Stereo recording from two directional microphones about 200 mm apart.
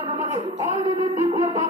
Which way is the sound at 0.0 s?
25° right (ahead or behind).